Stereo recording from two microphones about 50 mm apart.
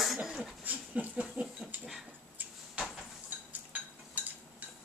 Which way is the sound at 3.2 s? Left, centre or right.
Right.